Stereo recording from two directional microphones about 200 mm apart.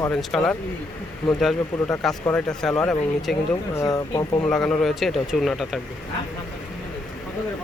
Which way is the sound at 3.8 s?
15° left (ahead or behind).